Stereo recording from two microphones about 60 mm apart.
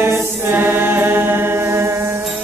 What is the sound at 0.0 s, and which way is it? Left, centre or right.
Music, right.